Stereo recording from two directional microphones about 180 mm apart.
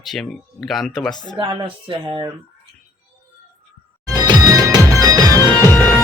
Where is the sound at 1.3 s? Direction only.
25° right (ahead or behind).